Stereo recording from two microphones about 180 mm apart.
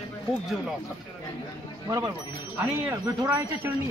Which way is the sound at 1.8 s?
20° right (ahead or behind).